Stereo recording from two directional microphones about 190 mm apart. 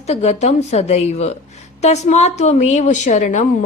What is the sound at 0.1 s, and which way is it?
A woman's voice, 35° left (ahead or behind).